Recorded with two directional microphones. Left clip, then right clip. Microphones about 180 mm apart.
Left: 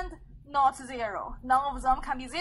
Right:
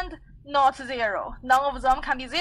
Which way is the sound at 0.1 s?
35° right (ahead or behind).